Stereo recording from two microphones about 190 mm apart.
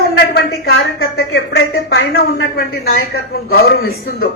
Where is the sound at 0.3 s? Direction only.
55° left (ahead or behind).